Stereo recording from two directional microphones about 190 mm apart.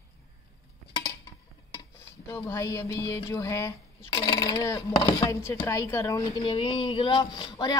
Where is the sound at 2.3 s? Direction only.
15° left (ahead or behind).